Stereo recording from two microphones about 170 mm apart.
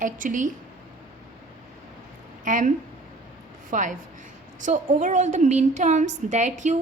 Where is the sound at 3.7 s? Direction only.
50° right (ahead or behind).